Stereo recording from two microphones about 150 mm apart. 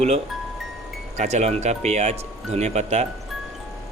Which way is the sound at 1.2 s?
50° right (ahead or behind).